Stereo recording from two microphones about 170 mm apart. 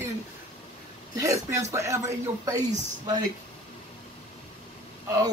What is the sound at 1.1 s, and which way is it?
A man's voice, 20° right (ahead or behind).